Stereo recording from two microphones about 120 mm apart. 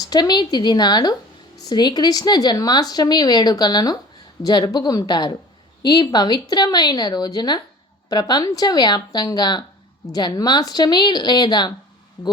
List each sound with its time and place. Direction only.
0.0 s speech: 35° left (ahead or behind)